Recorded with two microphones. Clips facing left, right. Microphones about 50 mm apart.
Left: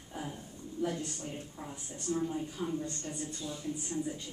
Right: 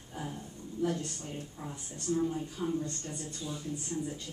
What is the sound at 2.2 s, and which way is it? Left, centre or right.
Speech, centre.